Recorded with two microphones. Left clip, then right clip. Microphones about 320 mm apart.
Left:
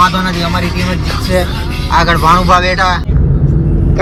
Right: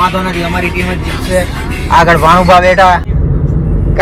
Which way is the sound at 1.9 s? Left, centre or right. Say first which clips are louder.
Right 3 dB; centre.